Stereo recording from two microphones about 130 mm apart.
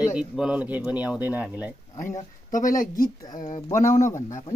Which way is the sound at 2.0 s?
85° left.